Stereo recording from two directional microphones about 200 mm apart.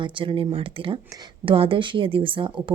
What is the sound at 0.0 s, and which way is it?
A woman's voice, 25° right (ahead or behind).